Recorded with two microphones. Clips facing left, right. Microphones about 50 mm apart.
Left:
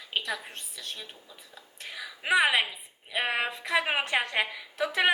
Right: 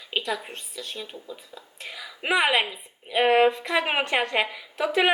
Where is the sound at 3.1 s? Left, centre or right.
Right.